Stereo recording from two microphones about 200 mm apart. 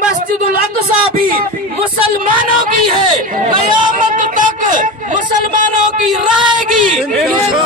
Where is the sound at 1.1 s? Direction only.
45° right (ahead or behind).